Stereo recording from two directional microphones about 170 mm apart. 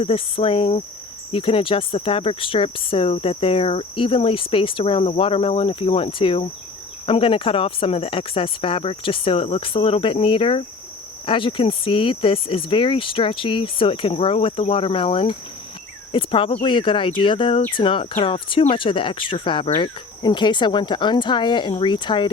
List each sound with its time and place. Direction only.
0.0 s speech: 35° left (ahead or behind)